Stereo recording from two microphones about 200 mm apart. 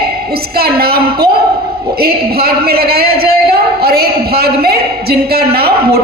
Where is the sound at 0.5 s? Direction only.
50° right (ahead or behind).